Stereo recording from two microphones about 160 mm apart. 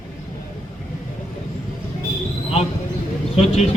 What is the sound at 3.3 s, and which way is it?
Speech, 40° left (ahead or behind).